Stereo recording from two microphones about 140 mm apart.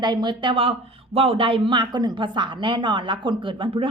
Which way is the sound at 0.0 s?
30° right (ahead or behind).